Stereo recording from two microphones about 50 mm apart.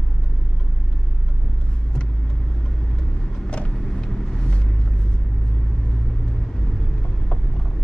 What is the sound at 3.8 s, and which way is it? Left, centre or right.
Vehicle, centre.